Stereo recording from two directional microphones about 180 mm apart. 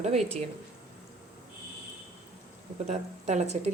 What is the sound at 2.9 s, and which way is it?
Speech, 40° right (ahead or behind).